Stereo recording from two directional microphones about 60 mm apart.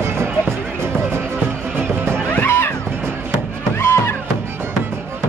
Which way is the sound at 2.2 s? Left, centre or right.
Left.